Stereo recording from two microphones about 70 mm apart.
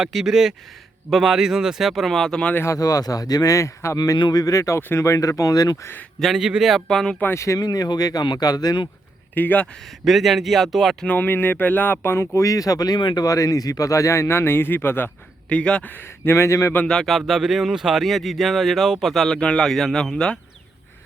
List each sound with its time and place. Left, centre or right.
0.0 s speech: centre
2.6 s speech: left
3.9 s speech: left
6.1 s speech: centre
6.8 s speech: centre
7.3 s speech: left
7.6 s speech: left
9.3 s speech: left
10.0 s speech: centre
11.0 s speech: left
15.4 s speech: centre
15.9 s speech: left
16.8 s speech: centre
19.3 s speech: centre